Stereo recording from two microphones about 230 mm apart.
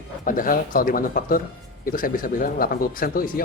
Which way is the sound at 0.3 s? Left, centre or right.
Left.